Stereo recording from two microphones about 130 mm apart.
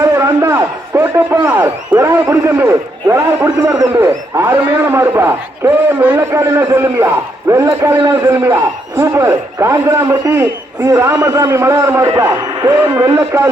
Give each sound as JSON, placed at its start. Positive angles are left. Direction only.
{"t": 0.0, "sound": "a man's voice", "side_deg": -20}